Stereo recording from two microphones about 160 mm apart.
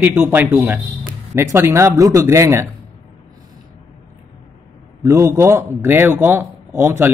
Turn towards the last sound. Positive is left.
turn(degrees=-15)  # may be behind; listen again after turning